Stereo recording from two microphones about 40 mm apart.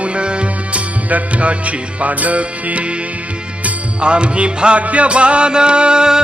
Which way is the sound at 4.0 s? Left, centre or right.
Right.